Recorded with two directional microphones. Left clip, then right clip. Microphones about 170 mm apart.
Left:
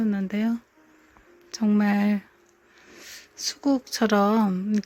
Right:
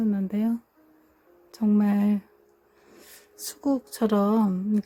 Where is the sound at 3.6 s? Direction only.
15° left (ahead or behind).